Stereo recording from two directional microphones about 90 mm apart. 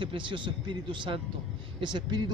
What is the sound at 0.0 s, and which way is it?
A man's voice, 65° right (ahead or behind).